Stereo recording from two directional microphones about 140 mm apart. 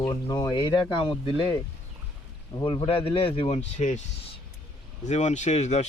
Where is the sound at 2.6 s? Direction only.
35° left (ahead or behind); by 4.0 s 55° left (ahead or behind).